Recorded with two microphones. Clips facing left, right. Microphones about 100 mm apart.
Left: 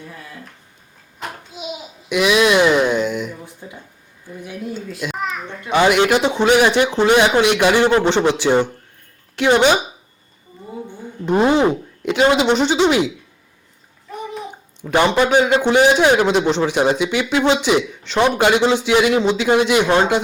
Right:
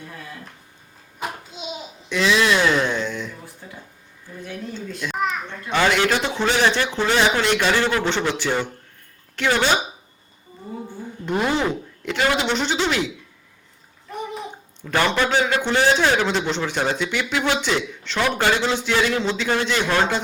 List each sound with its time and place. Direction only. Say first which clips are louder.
1.5 s babbling: left 3 dB; 10° left (ahead or behind)
4.4 s speech: left 3 dB; 10° left (ahead or behind)
5.1 s children playing: right 3 dB; centre (ahead or behind)
5.5 s a man's voice: left 7 dB; 15° left (ahead or behind)
11.3 s speech: left 7 dB; 25° left (ahead or behind)
14.8 s a man's voice: left 5 dB; 20° left (ahead or behind)